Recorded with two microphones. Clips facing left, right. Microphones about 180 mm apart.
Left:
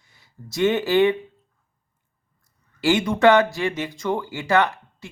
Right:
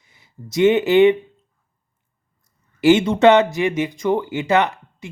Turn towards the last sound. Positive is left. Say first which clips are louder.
# right 1 dB
turn(degrees=-20)  # may be behind; listen again after turning